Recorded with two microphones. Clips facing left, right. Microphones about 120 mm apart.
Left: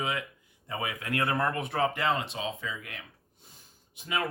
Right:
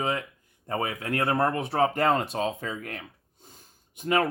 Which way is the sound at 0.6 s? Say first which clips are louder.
Right 5 dB; 50° right (ahead or behind).